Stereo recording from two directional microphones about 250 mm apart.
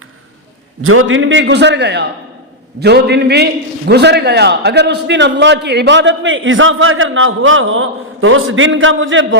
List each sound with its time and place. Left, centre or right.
0.8 s a man's voice: right